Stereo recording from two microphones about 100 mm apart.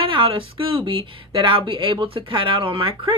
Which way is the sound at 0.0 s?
65° right (ahead or behind).